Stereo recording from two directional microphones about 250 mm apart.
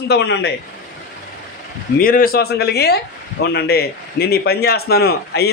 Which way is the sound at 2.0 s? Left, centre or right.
Left.